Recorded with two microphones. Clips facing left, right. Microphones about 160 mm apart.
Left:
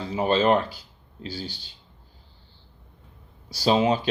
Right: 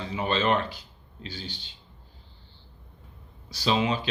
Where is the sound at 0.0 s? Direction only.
40° left (ahead or behind).